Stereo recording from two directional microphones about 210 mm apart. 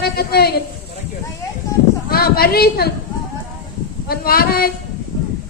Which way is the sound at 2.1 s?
45° left (ahead or behind).